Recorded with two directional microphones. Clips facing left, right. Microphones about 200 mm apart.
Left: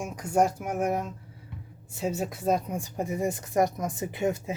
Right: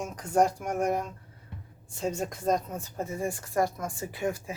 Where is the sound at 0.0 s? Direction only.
10° left (ahead or behind).